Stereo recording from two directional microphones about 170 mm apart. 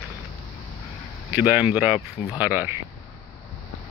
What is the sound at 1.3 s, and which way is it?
Speech, 10° right (ahead or behind).